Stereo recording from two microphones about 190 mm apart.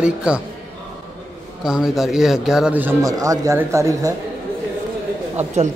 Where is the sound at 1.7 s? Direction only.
5° right (ahead or behind).